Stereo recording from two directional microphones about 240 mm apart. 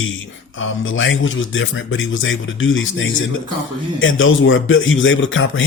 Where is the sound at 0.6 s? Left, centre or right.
Left.